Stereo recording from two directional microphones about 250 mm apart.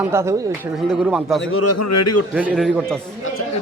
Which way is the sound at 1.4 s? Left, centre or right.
Left.